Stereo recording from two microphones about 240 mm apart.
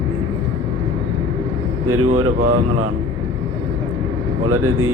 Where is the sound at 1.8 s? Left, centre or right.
Right.